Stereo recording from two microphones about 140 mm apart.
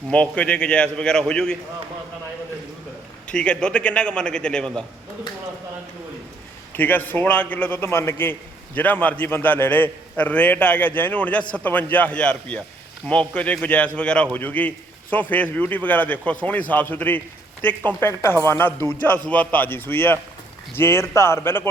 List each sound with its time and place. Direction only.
0.1 s a man's voice: 10° left (ahead or behind)
3.3 s a man's voice: 5° left (ahead or behind)
6.7 s a man's voice: 15° left (ahead or behind)